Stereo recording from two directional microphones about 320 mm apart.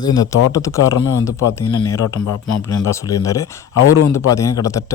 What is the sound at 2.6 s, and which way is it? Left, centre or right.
Speech, centre.